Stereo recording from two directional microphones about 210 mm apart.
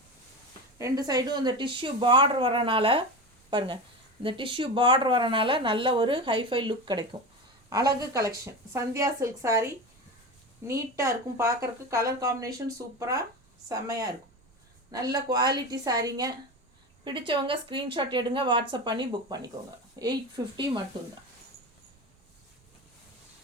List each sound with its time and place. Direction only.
0.8 s speech: 15° right (ahead or behind)